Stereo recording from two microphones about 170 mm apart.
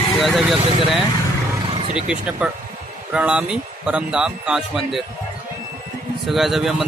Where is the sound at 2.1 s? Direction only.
5° right (ahead or behind).